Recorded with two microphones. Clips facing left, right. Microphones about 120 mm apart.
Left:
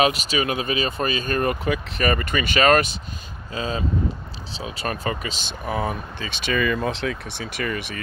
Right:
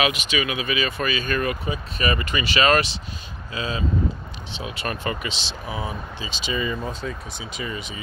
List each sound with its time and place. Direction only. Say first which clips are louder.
0.0 s speech: left 3 dB; 40° left (ahead or behind)
1.6 s speech: left 4 dB; 70° left (ahead or behind)
2.0 s speech: left 2 dB; 50° left (ahead or behind); by 8.0 s 65° left (ahead or behind)